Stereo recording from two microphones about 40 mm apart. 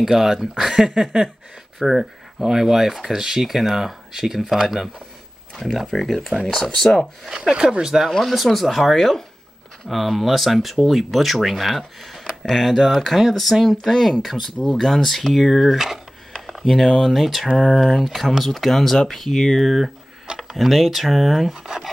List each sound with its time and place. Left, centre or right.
0.0 s speech: centre
5.6 s speech: centre
7.2 s speech: centre
7.6 s speech: right
8.2 s speech: centre